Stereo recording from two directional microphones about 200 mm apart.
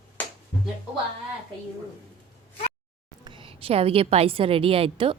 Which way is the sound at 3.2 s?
25° right (ahead or behind).